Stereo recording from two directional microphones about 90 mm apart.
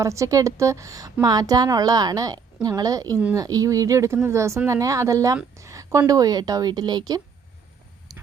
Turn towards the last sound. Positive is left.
turn(degrees=-50)  # may be behind; listen again after turning